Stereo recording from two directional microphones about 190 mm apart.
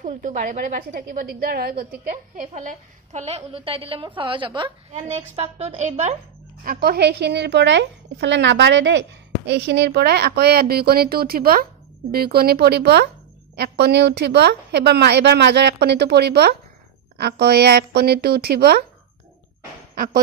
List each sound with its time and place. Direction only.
0.0 s a woman's voice: 45° right (ahead or behind)
2.0 s a woman's voice: 45° right (ahead or behind)
6.6 s a woman's voice: 50° right (ahead or behind)